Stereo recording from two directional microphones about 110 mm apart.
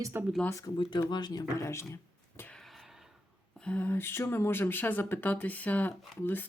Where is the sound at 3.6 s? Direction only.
15° left (ahead or behind).